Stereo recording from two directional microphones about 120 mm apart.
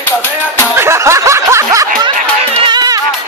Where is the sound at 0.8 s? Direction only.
25° right (ahead or behind).